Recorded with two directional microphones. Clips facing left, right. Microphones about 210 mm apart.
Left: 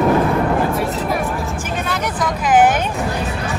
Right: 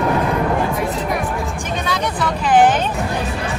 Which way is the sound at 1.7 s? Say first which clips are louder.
Right 2 dB; 10° left (ahead or behind).